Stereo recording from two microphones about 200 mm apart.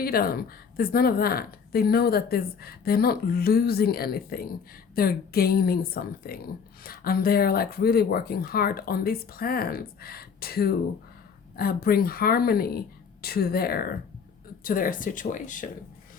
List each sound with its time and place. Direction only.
0.0 s speech: 50° left (ahead or behind)